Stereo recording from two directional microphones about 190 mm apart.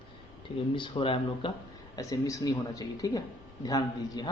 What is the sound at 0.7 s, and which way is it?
Speech, 25° left (ahead or behind).